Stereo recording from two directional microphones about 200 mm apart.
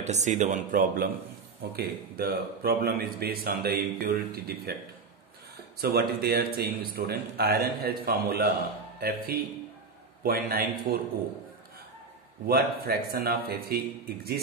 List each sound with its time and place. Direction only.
0.0 s a man's voice: 35° right (ahead or behind); by 4.7 s 50° right (ahead or behind)
5.8 s a man's voice: 50° right (ahead or behind)
12.4 s a man's voice: 50° right (ahead or behind)